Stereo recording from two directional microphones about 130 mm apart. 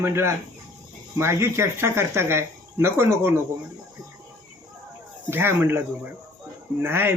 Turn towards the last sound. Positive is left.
turn(degrees=-15)  # may be behind; listen again after turning